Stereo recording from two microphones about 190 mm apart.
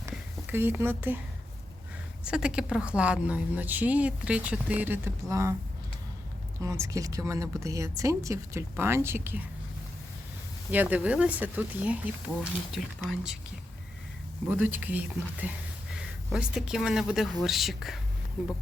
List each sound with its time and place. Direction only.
0.1 s a sound: 10° right (ahead or behind)
2.2 s speech: 5° right (ahead or behind)
6.6 s speech: 15° right (ahead or behind)
10.7 s speech: 10° right (ahead or behind)
14.4 s speech: 10° right (ahead or behind)